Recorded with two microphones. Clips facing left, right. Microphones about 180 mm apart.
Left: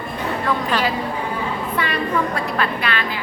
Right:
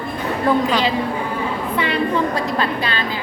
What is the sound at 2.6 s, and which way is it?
Speech, 30° right (ahead or behind).